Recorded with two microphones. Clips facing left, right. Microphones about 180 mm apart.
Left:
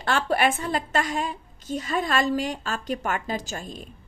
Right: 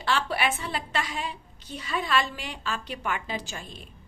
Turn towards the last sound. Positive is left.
turn(degrees=45)  # may be behind; listen again after turning